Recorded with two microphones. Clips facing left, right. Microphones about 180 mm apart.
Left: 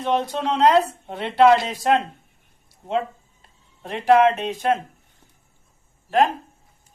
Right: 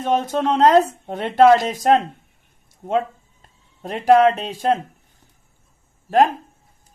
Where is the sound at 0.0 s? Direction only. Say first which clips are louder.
Right 3 dB; 45° right (ahead or behind).